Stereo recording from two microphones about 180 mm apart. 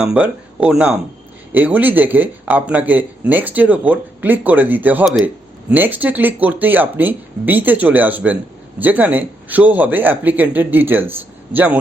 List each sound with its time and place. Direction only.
0.0 s speech: 10° right (ahead or behind)